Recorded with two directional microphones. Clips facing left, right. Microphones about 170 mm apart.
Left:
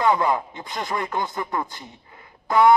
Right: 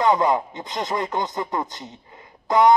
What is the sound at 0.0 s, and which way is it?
A man's voice, 20° right (ahead or behind).